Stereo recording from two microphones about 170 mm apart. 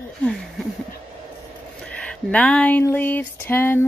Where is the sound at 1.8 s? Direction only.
5° left (ahead or behind).